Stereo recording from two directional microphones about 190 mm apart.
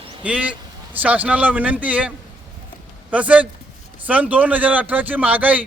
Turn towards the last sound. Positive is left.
turn(degrees=-10)  # may be behind; listen again after turning